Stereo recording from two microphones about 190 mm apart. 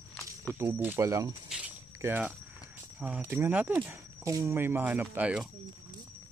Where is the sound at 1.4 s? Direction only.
5° right (ahead or behind).